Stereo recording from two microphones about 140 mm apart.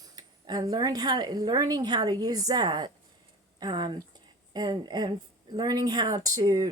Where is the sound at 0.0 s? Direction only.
30° right (ahead or behind).